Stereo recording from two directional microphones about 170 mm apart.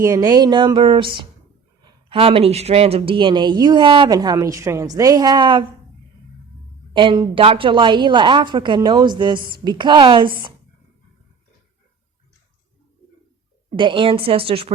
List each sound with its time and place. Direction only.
0.0 s speech: 20° right (ahead or behind)
6.9 s speech: 30° right (ahead or behind)
13.7 s a woman's voice: 30° right (ahead or behind)